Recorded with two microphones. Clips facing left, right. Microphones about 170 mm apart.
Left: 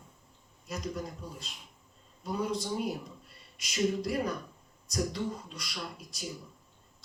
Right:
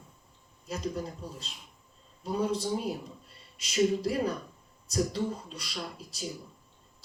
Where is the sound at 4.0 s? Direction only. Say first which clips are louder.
Right 2 dB; 30° right (ahead or behind).